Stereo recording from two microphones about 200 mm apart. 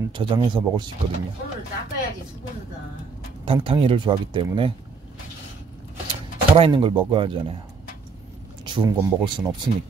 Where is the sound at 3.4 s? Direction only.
25° right (ahead or behind).